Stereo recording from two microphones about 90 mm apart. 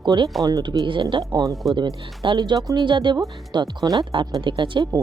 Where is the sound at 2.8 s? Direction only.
60° right (ahead or behind).